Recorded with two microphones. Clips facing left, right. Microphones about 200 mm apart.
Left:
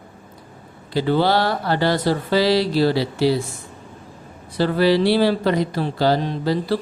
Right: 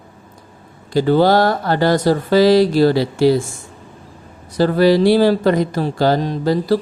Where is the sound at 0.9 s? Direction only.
45° right (ahead or behind).